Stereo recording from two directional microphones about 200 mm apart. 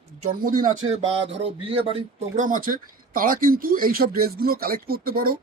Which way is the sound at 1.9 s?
40° right (ahead or behind).